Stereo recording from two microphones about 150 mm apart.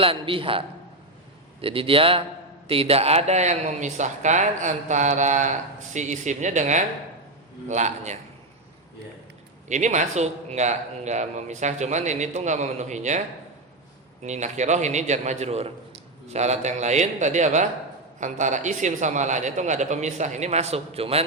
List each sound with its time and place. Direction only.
0.0 s a man's voice: 35° right (ahead or behind)
1.6 s a man's voice: 35° right (ahead or behind)
9.6 s speech: 55° right (ahead or behind)